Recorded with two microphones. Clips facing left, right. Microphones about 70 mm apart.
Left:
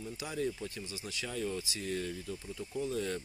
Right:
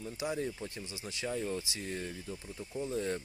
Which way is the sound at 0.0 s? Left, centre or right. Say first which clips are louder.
Right 1 dB; right.